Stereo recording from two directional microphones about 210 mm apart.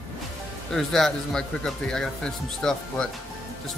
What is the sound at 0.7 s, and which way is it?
Speech, centre (ahead or behind).